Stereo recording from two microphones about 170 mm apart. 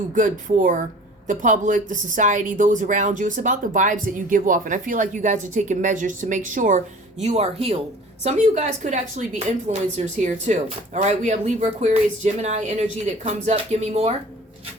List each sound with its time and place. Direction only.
0.1 s speech: 50° right (ahead or behind)